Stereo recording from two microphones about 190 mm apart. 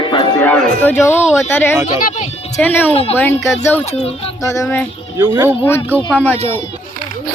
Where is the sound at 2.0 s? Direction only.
40° left (ahead or behind).